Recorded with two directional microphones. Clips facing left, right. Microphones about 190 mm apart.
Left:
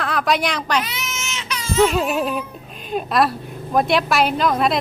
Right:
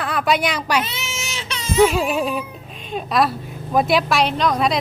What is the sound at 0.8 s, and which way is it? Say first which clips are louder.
Baby cry: right 1 dB; 25° right (ahead or behind).